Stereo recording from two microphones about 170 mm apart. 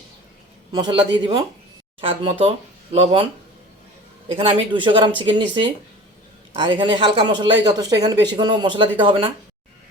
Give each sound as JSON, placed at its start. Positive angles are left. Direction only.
{"t": 0.7, "sound": "speech", "side_deg": -25}
{"t": 4.3, "sound": "speech", "side_deg": -30}